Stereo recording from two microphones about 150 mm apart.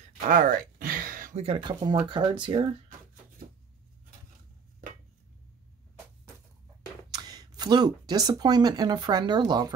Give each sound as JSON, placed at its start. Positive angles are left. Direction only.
{"t": 0.3, "sound": "a sound", "side_deg": -65}
{"t": 1.3, "sound": "speech", "side_deg": -40}
{"t": 7.1, "sound": "speech", "side_deg": -25}